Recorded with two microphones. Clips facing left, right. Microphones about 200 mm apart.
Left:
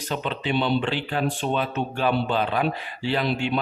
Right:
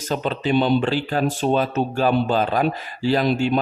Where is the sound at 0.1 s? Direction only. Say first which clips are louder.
Right 5 dB; 40° right (ahead or behind).